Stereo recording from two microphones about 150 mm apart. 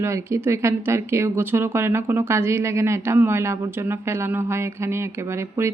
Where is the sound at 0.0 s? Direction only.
20° right (ahead or behind).